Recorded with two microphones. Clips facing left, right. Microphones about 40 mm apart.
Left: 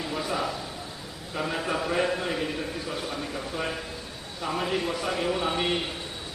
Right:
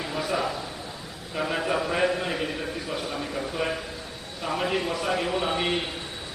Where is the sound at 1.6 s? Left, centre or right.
Centre.